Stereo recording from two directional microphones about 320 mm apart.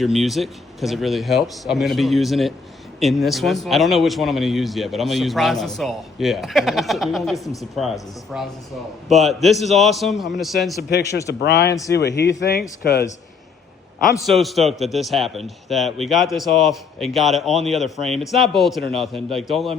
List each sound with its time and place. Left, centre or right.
0.0 s a man's voice: centre
7.4 s speech: centre
8.3 s a man's voice: centre
11.3 s speech: left
11.7 s speech: centre
11.9 s speech: left
14.0 s a man's voice: centre